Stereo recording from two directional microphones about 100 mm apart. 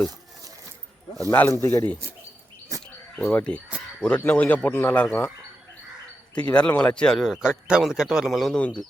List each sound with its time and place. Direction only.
1.3 s speech: 20° left (ahead or behind)
2.7 s a sound: 35° right (ahead or behind)
3.2 s speech: 10° left (ahead or behind)
6.5 s speech: 15° left (ahead or behind)
7.3 s speech: 5° right (ahead or behind)